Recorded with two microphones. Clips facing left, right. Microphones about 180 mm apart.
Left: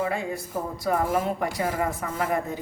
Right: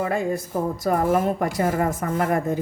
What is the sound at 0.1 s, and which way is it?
Speech, 45° right (ahead or behind).